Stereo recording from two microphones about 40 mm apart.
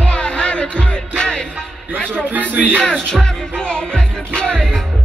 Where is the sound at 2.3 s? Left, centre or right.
Right.